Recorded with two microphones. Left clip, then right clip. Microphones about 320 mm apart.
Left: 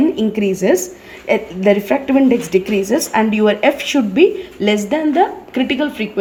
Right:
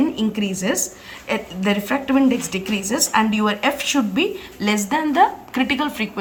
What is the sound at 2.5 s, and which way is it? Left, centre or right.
A woman's voice, centre.